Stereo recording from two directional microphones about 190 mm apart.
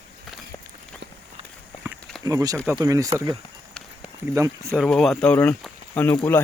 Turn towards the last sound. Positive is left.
turn(degrees=10)  # may be behind; listen again after turning